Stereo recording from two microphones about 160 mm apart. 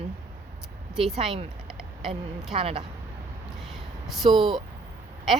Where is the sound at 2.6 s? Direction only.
35° right (ahead or behind).